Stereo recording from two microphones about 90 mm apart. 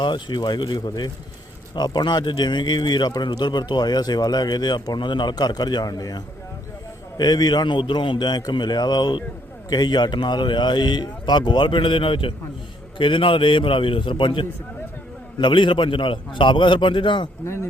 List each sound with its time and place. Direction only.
0.0 s a man's voice: 60° left (ahead or behind)
17.4 s speech: 30° left (ahead or behind)